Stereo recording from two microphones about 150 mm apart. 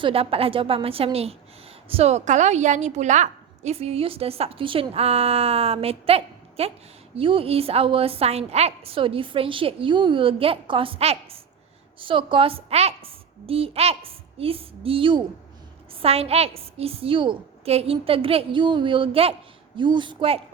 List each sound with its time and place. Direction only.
0.0 s a woman's voice: 40° right (ahead or behind)